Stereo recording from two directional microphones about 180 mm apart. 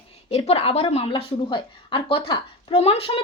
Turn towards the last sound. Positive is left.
turn(degrees=35)  # may be behind; listen again after turning